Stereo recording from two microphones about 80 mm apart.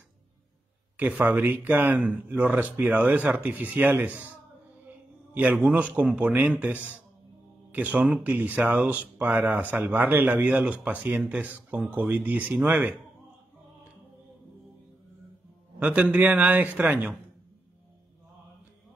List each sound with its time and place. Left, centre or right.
0.9 s speech: centre
5.3 s speech: centre
15.8 s speech: centre